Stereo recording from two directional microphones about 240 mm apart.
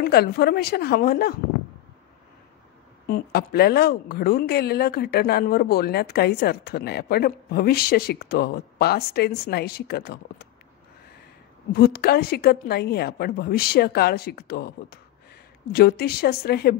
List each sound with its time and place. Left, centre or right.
0.0 s speech: left
3.1 s speech: left
11.7 s speech: left